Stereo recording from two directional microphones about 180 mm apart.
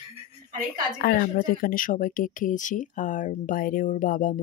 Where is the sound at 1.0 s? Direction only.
55° left (ahead or behind).